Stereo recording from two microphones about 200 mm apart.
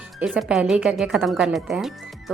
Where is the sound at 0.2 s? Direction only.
5° right (ahead or behind).